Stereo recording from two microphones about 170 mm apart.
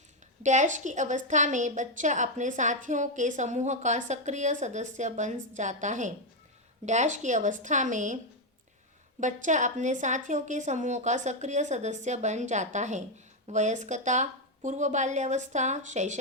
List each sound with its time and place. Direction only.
0.4 s a woman's voice: 45° right (ahead or behind)
9.2 s a woman's voice: 45° right (ahead or behind)